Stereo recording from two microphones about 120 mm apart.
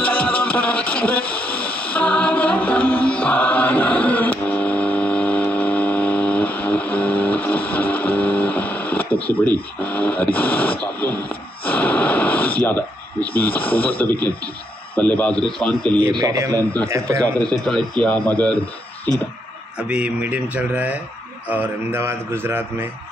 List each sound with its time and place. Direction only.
0.0 s radio: 10° left (ahead or behind)
9.8 s speech: 10° left (ahead or behind)
11.6 s a sound: 10° left (ahead or behind)
13.3 s speech: 15° left (ahead or behind)
16.1 s a man's voice: 30° right (ahead or behind)
17.4 s speech: 5° left (ahead or behind)
19.9 s a man's voice: 10° right (ahead or behind)